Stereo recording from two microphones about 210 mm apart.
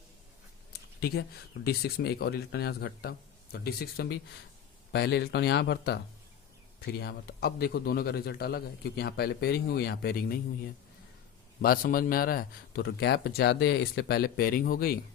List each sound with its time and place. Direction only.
0.7 s a sound: 50° left (ahead or behind)
1.6 s a man's voice: 50° left (ahead or behind)
11.6 s a man's voice: 45° left (ahead or behind)